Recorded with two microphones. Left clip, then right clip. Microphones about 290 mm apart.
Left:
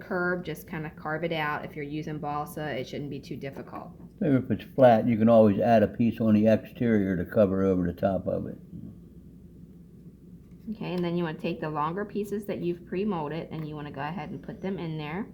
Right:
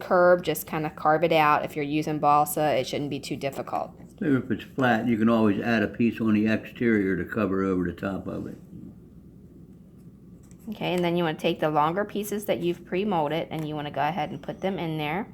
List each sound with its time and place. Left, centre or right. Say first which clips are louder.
0.0 s a woman's voice: right 10 dB; right
4.2 s speech: right 1 dB; left
10.7 s a woman's voice: right 6 dB; right